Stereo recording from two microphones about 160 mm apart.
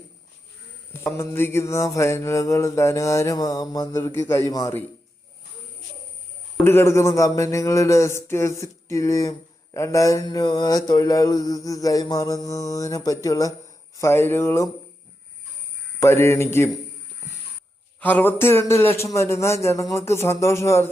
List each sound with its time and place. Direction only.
0.9 s mantra: 15° left (ahead or behind)
6.7 s mantra: 15° left (ahead or behind)
16.0 s mantra: 15° left (ahead or behind)
18.0 s mantra: 10° left (ahead or behind)